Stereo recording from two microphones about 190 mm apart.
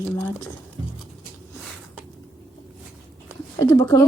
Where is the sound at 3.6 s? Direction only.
15° left (ahead or behind).